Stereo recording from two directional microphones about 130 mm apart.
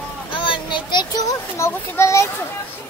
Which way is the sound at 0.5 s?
40° left (ahead or behind).